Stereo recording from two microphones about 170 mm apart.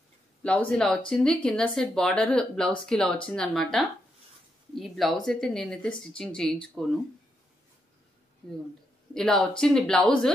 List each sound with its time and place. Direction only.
0.4 s speech: 5° left (ahead or behind)
9.1 s speech: 5° left (ahead or behind)